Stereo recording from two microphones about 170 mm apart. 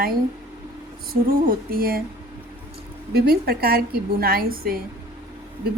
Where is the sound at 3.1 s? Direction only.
65° right (ahead or behind).